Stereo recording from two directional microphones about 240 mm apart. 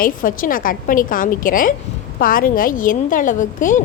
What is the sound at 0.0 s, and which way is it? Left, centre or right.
A woman's voice, left.